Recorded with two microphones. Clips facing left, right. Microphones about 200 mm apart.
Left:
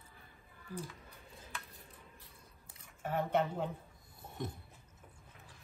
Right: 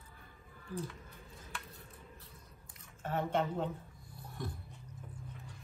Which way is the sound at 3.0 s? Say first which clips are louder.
Left 1 dB; 10° left (ahead or behind).